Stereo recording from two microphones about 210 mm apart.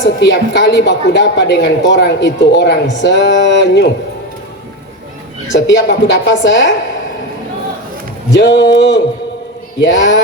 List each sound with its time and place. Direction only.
0.0 s a woman's voice: 55° left (ahead or behind)
5.5 s a woman's voice: 55° left (ahead or behind)
8.3 s a woman's voice: 55° left (ahead or behind)